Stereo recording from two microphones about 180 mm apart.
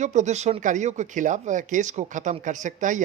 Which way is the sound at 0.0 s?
40° right (ahead or behind).